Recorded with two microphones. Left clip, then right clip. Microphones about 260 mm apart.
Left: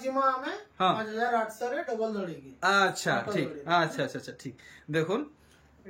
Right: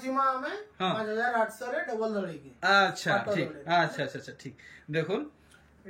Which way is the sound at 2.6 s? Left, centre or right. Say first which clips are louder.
Right 1 dB; centre.